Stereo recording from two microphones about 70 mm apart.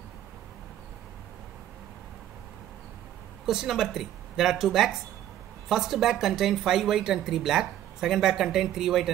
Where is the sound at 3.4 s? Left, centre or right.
Centre.